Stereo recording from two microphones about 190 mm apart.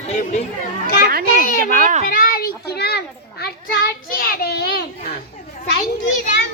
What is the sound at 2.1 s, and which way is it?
Children playing, 50° left (ahead or behind).